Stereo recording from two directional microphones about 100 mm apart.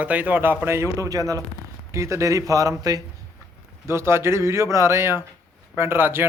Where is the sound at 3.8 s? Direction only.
25° right (ahead or behind).